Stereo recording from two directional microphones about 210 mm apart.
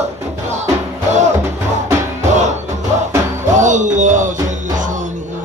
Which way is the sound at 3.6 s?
35° right (ahead or behind).